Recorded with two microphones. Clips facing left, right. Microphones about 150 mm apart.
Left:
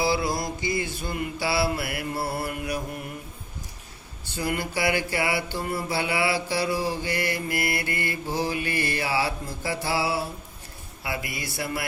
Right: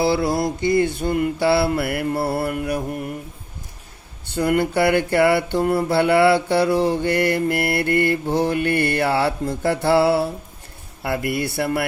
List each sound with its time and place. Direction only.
0.3 s mantra: 65° right (ahead or behind)
4.3 s mantra: 60° right (ahead or behind)